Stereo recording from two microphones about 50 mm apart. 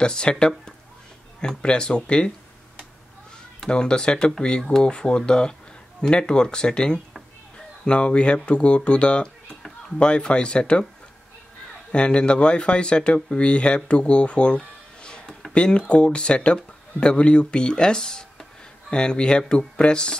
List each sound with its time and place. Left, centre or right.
0.0 s speech: centre
3.6 s speech: centre
11.9 s speech: left